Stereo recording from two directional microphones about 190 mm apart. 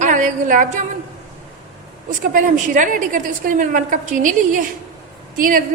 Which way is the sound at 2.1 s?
45° right (ahead or behind).